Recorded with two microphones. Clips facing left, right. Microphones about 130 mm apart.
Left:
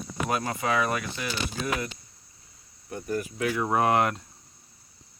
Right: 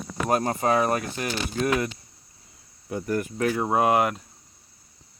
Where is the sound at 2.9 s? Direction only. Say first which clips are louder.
Right 4 dB; 75° right (ahead or behind).